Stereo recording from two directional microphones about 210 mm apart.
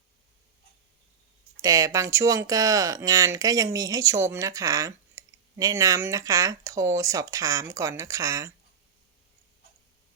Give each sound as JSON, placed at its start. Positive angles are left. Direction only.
{"t": 1.6, "sound": "speech", "side_deg": -15}